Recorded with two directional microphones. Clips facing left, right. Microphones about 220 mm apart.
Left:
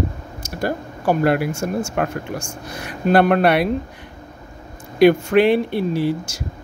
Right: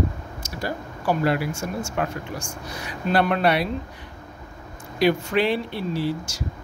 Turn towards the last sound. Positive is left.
turn(degrees=55)  # may be behind; listen again after turning